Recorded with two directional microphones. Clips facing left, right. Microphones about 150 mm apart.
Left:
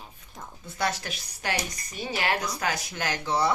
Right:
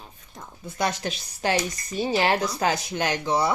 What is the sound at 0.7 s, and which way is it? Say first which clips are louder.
Speech: right 3 dB; 20° right (ahead or behind).